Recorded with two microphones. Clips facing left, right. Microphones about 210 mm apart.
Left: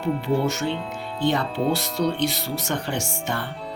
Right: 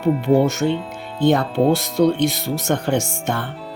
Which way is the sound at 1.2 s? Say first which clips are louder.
Right 7 dB; 50° right (ahead or behind).